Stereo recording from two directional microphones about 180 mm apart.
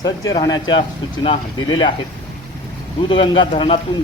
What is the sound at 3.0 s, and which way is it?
Speech, 30° left (ahead or behind).